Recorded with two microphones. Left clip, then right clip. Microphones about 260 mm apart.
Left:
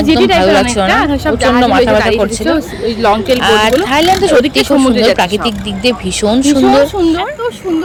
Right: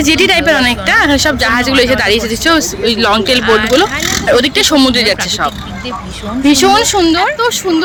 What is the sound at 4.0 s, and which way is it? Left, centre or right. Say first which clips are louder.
Speech: left 7 dB; left.